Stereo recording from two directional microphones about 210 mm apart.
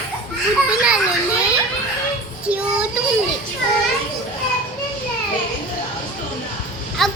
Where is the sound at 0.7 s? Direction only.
5° right (ahead or behind).